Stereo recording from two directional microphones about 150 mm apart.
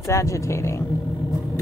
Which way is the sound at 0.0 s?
20° left (ahead or behind).